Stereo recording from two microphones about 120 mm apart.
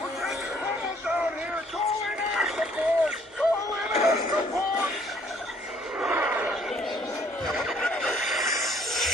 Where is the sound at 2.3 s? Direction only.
5° right (ahead or behind).